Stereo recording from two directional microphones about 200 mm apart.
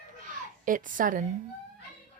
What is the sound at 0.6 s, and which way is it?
Speech, 40° right (ahead or behind).